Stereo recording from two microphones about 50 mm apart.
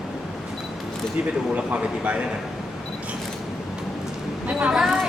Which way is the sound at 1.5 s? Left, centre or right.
Right.